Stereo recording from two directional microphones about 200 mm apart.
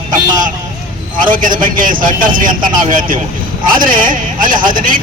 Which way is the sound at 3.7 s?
45° right (ahead or behind).